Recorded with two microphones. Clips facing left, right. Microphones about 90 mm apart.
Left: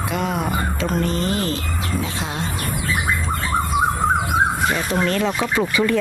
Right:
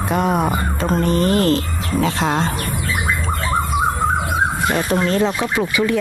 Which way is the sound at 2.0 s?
85° right.